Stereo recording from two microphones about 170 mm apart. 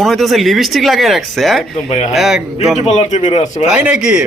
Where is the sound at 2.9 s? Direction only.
40° left (ahead or behind).